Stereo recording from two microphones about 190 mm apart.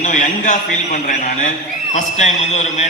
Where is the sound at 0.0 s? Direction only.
40° left (ahead or behind).